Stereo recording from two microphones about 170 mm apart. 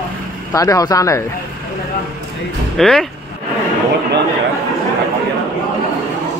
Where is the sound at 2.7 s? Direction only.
5° left (ahead or behind).